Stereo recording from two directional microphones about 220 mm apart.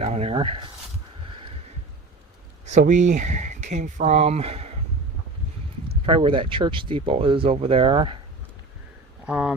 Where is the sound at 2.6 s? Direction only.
35° right (ahead or behind).